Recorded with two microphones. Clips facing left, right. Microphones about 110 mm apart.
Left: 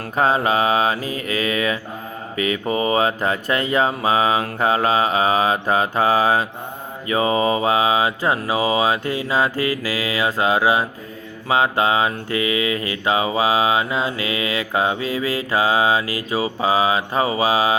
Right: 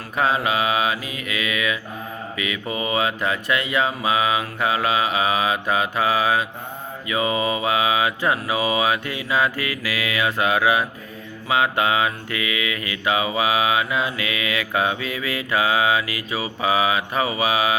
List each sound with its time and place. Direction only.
0.2 s mantra: 35° left (ahead or behind)